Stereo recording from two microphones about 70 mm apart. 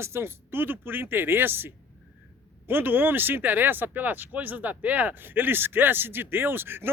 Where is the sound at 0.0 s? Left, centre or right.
Right.